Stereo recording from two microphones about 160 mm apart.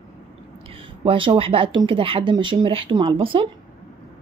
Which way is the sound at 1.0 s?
35° right (ahead or behind).